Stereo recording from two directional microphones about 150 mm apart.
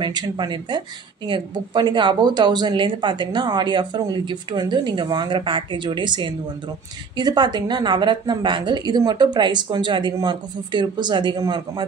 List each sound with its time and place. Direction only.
0.0 s a woman's voice: 30° right (ahead or behind)